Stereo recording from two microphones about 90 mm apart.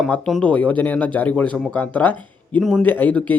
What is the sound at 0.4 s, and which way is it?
Speech, 15° left (ahead or behind).